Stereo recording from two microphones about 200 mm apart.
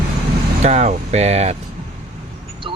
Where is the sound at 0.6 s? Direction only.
35° right (ahead or behind).